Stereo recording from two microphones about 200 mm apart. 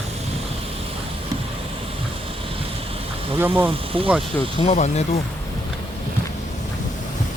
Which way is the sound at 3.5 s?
25° right (ahead or behind).